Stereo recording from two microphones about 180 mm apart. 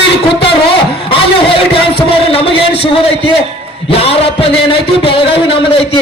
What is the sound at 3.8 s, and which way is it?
A man's voice, 35° left (ahead or behind).